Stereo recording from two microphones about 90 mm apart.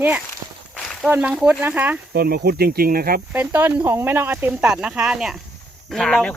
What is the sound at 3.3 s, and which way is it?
Speech, 20° right (ahead or behind).